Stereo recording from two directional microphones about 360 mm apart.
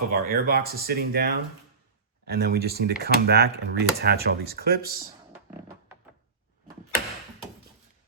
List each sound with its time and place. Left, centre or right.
0.1 s speech: right